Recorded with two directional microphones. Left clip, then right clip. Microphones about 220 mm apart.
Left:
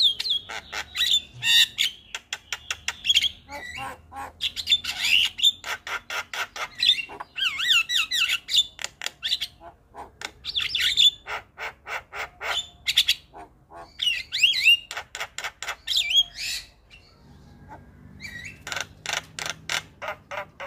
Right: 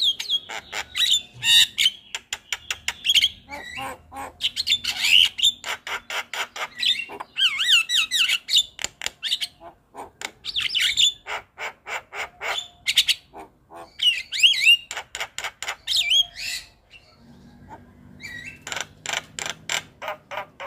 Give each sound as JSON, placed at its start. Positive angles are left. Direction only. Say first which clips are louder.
{"t": 0.2, "sound": "squawk", "louder": "right 1 dB", "side_deg": 0}
{"t": 3.5, "sound": "bird", "louder": "right 2 dB", "side_deg": -5}
{"t": 18.6, "sound": "mechanisms", "louder": "even", "side_deg": 0}